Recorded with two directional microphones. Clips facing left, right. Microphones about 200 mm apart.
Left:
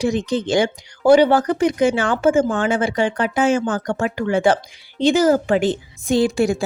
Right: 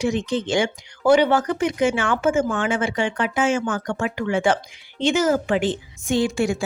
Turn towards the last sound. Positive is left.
turn(degrees=35)  # may be behind; listen again after turning